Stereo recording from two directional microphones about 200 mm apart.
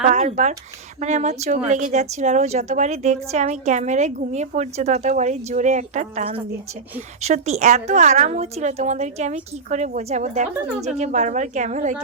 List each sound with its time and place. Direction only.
0.1 s a woman's voice: 35° right (ahead or behind)